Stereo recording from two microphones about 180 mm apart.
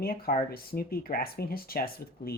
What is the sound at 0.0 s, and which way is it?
Speech, 55° left (ahead or behind).